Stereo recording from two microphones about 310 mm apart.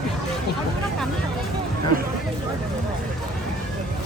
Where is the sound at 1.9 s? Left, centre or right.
Right.